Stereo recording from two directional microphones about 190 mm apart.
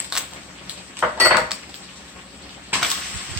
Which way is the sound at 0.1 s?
5° right (ahead or behind).